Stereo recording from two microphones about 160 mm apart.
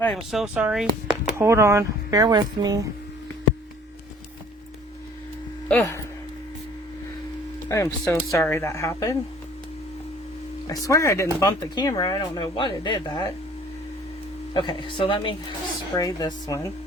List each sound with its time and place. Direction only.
0.0 s speech: centre (ahead or behind)
1.4 s speech: 15° right (ahead or behind)
5.6 s speech: 15° left (ahead or behind)
7.7 s speech: 20° left (ahead or behind)
10.7 s speech: 20° left (ahead or behind)
14.5 s a woman's voice: 30° left (ahead or behind)
16.0 s speech: 20° left (ahead or behind)